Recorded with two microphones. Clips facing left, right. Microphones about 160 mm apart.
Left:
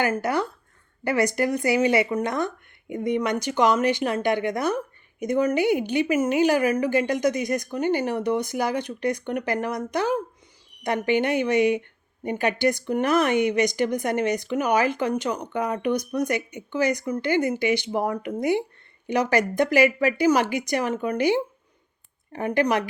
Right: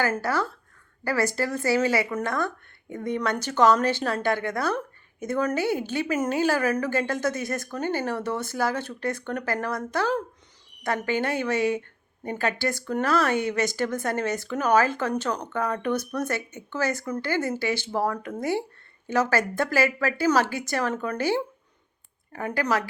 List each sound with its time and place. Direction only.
0.0 s a woman's voice: 20° left (ahead or behind)